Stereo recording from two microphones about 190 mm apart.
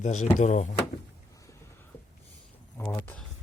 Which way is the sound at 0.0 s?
40° left (ahead or behind).